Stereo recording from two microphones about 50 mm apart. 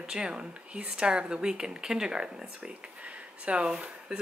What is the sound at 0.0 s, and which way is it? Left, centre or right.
Speech, centre.